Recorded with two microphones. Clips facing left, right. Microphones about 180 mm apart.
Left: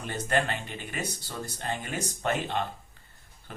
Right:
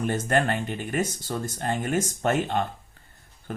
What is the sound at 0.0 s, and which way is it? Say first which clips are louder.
Speech: right 5 dB; 50° right (ahead or behind).